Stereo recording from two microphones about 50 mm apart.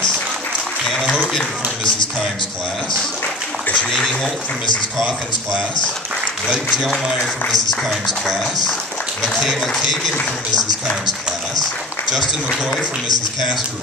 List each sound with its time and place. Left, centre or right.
3.9 s speech: centre
6.7 s speech: centre